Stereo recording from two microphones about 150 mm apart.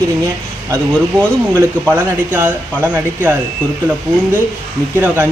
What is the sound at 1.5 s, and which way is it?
Speech, 15° right (ahead or behind).